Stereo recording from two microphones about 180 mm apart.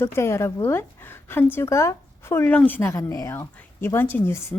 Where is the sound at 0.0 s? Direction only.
15° left (ahead or behind).